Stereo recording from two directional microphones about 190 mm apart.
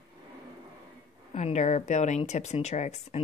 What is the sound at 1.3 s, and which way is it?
A woman's voice, 35° left (ahead or behind).